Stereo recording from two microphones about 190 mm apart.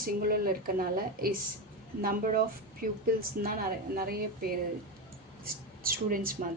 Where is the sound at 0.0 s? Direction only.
50° right (ahead or behind).